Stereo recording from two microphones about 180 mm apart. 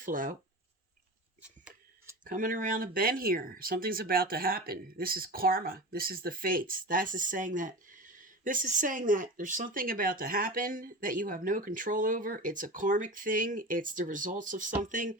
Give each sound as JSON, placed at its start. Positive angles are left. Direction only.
{"t": 0.0, "sound": "speech", "side_deg": -50}
{"t": 2.2, "sound": "speech", "side_deg": -50}